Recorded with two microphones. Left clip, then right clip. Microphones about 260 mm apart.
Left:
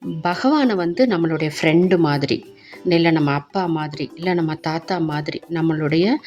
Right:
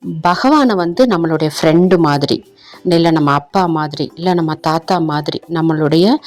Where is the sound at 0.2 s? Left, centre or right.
Centre.